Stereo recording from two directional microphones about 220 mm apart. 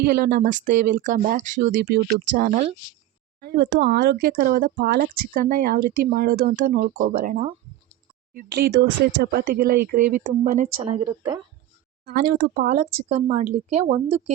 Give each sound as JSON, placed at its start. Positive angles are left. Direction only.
{"t": 0.0, "sound": "speech", "side_deg": -45}
{"t": 3.4, "sound": "speech", "side_deg": -45}
{"t": 12.0, "sound": "speech", "side_deg": -45}